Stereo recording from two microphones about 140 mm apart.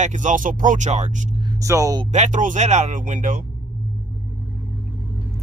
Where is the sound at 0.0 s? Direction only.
60° right (ahead or behind).